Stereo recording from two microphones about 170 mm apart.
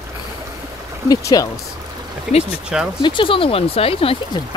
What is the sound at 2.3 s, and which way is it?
Speech, 40° left (ahead or behind).